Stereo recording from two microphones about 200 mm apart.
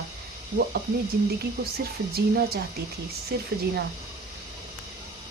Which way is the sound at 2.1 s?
50° right (ahead or behind).